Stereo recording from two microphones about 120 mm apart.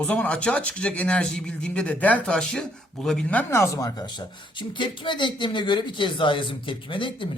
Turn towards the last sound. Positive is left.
turn(degrees=45)  # may be behind; listen again after turning